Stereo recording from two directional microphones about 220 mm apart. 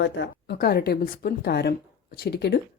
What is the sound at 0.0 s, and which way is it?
A woman's voice, 50° left (ahead or behind).